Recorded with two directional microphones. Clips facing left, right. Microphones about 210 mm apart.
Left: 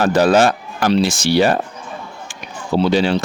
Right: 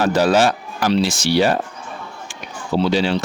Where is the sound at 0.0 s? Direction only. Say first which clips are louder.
Left 2 dB; 50° left (ahead or behind).